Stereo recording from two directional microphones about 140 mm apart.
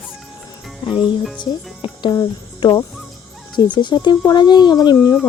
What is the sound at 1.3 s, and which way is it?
Music, 35° left (ahead or behind).